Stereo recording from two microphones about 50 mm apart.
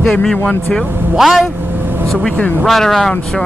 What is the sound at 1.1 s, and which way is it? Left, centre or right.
Speech, centre.